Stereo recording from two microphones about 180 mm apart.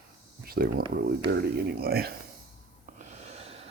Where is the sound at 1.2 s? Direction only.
60° right (ahead or behind).